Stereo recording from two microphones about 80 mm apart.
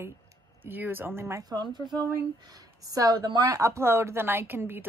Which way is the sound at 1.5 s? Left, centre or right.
Right.